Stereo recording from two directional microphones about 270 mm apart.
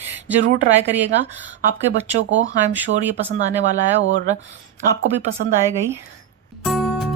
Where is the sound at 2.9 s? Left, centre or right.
Right.